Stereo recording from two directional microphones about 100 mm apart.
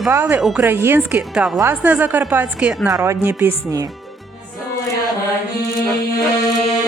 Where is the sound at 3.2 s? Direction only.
20° right (ahead or behind).